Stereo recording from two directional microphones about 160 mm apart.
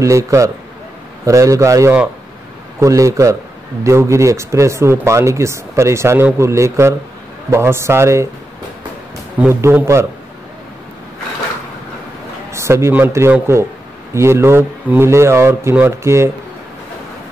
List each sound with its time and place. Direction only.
0.0 s a man's voice: 20° right (ahead or behind)
9.4 s speech: 15° right (ahead or behind)
12.4 s a man's voice: 15° right (ahead or behind)